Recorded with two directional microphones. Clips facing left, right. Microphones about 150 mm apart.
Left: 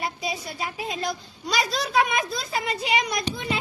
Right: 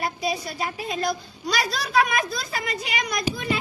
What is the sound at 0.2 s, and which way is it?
A child's voice, 20° left (ahead or behind).